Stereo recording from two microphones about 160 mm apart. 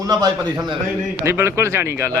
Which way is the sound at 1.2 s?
15° right (ahead or behind).